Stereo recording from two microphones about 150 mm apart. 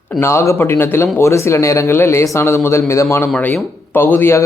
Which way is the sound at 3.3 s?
5° left (ahead or behind).